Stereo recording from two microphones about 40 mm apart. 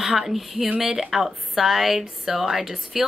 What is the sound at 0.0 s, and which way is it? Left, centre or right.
A woman's voice, centre.